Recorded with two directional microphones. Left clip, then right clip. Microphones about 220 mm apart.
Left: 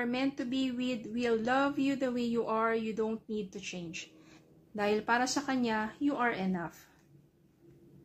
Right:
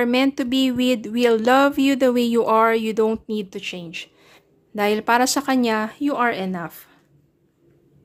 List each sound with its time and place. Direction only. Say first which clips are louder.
0.0 s speech: right 14 dB; 45° right (ahead or behind)